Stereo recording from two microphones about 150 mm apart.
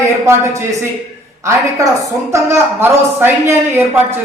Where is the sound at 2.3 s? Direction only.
15° right (ahead or behind).